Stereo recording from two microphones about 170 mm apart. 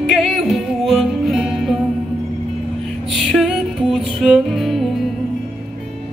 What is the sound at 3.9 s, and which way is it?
Music, centre (ahead or behind).